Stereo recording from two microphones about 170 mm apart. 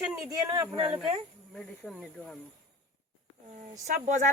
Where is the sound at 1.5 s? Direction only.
Centre (ahead or behind).